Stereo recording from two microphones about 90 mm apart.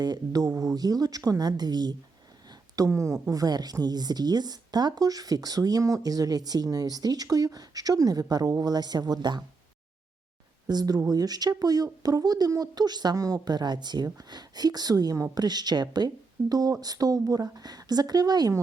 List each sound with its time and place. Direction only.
0.0 s speech: 45° right (ahead or behind)
10.7 s speech: 50° right (ahead or behind)